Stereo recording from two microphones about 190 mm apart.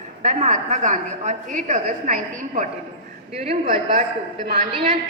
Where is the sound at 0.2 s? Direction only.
40° right (ahead or behind).